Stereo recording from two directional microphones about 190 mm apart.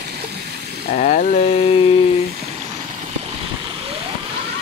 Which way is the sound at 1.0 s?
40° left (ahead or behind).